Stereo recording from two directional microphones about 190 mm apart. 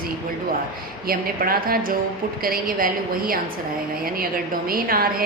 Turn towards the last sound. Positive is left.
turn(degrees=-50)  # may be behind; listen again after turning